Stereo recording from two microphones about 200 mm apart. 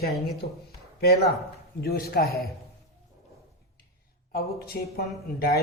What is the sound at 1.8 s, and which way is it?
Speech, 50° left (ahead or behind).